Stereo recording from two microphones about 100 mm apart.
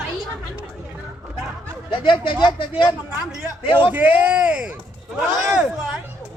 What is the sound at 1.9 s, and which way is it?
Speech, 60° left (ahead or behind).